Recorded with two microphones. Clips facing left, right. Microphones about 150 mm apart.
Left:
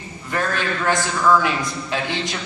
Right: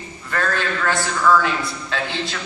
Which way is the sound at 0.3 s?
20° left (ahead or behind).